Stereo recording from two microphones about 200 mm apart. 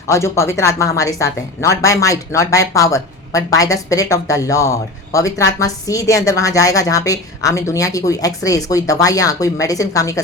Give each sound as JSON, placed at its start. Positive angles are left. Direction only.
{"t": 0.1, "sound": "speech", "side_deg": 15}